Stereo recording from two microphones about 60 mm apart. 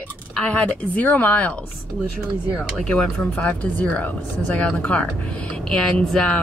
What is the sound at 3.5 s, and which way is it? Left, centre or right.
Speech, left.